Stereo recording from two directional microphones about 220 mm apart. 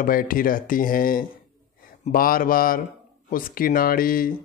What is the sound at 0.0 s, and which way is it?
Speech, 40° left (ahead or behind).